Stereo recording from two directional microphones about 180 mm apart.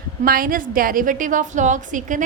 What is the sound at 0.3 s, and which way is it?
A woman's voice, 50° right (ahead or behind).